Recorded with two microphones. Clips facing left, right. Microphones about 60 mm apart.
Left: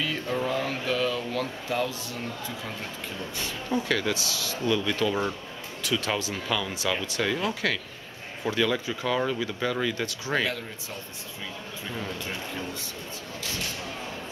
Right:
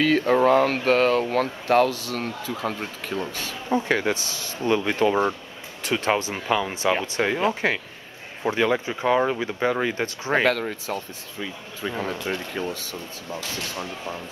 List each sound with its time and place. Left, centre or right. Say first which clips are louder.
0.0 s speech: right 10 dB; right
3.6 s speech: right 5 dB; right
10.4 s speech: right 8 dB; right